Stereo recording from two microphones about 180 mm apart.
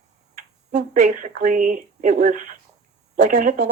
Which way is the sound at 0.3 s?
45° right (ahead or behind).